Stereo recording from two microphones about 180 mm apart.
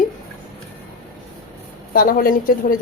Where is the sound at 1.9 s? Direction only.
50° left (ahead or behind).